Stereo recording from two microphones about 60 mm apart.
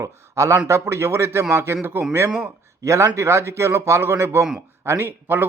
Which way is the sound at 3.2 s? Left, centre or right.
Right.